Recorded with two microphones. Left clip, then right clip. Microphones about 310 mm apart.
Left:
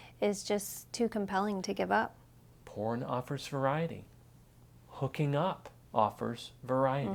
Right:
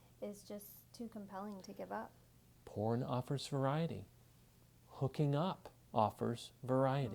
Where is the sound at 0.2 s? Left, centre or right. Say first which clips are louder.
Left 16 dB; left.